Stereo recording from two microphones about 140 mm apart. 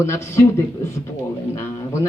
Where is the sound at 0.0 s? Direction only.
20° left (ahead or behind).